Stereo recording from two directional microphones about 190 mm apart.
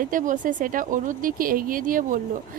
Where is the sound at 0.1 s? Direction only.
45° right (ahead or behind).